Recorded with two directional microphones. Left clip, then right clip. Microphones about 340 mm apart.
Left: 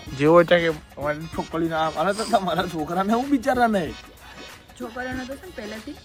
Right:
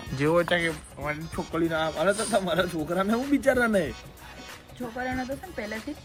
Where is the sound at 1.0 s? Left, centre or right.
Centre.